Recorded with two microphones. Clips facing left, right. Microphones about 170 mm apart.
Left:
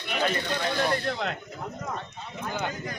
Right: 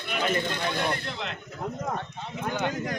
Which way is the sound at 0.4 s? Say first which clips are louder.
Left 1 dB; 50° right (ahead or behind).